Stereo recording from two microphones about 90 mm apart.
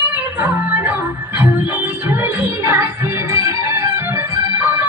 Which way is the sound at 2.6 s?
25° right (ahead or behind).